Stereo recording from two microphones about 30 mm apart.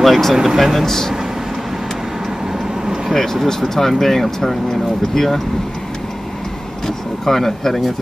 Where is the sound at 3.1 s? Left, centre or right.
Centre.